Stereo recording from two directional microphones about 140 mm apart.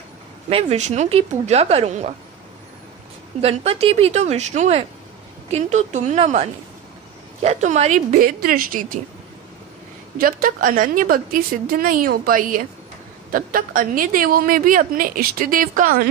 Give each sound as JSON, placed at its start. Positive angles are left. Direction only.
{"t": 0.5, "sound": "a woman's voice", "side_deg": -45}
{"t": 3.3, "sound": "a woman's voice", "side_deg": -45}
{"t": 8.2, "sound": "a woman's voice", "side_deg": -90}
{"t": 10.1, "sound": "a woman's voice", "side_deg": -90}
{"t": 13.3, "sound": "a woman's voice", "side_deg": -85}